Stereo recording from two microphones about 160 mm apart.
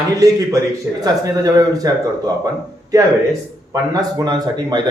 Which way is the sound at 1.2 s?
25° right (ahead or behind).